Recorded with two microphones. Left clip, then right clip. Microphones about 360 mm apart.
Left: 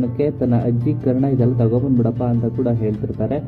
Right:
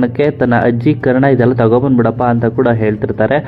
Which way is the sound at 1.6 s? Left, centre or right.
Right.